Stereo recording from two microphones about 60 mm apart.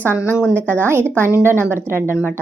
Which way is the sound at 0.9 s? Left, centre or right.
Right.